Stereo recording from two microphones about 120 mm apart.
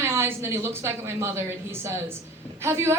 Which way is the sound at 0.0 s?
20° right (ahead or behind).